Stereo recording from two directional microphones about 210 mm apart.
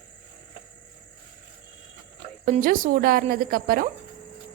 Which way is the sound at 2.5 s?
40° right (ahead or behind).